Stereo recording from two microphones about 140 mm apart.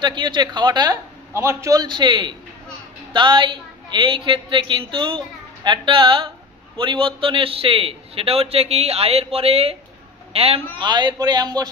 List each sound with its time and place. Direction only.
0.0 s a man's voice: 35° right (ahead or behind)
1.3 s a man's voice: 20° right (ahead or behind)